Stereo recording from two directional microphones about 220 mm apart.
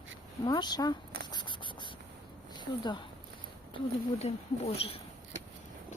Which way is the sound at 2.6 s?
20° left (ahead or behind).